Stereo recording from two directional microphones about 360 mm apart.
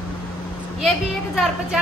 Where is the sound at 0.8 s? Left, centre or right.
Centre.